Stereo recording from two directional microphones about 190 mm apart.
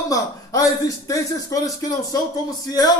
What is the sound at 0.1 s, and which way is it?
Speech, 15° left (ahead or behind).